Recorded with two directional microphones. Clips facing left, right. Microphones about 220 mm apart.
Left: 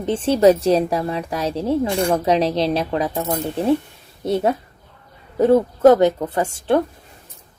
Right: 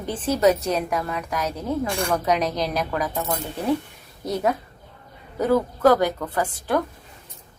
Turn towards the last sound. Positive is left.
turn(degrees=25)  # may be behind; listen again after turning